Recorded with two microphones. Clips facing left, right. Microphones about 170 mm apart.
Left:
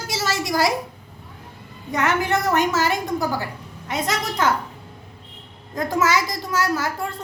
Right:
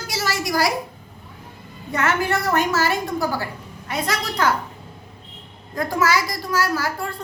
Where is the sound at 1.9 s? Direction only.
15° left (ahead or behind).